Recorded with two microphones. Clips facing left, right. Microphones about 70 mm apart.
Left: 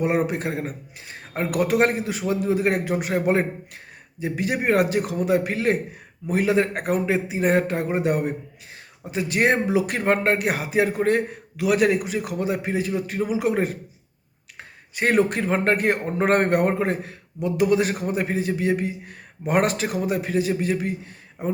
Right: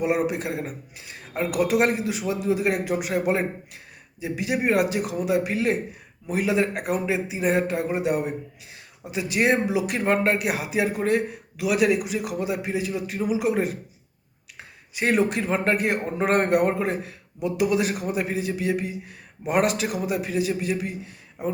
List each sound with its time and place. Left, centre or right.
0.0 s a man's voice: left
14.9 s a man's voice: left